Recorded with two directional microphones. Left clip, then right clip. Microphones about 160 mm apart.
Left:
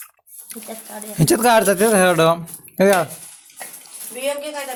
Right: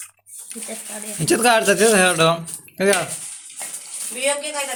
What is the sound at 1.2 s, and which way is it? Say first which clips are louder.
Speech: left 2 dB; 70° left (ahead or behind).